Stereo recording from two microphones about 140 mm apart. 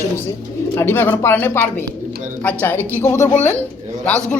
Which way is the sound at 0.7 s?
20° left (ahead or behind).